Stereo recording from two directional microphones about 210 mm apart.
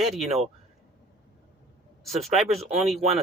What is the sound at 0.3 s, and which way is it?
Speech, 30° right (ahead or behind).